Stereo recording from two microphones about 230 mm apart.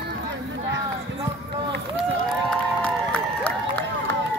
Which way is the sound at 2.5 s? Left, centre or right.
Centre.